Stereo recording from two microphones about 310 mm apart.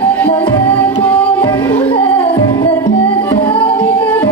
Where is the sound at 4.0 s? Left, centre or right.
Centre.